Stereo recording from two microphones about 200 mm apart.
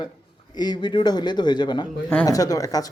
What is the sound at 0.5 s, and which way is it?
A man's voice, 20° left (ahead or behind).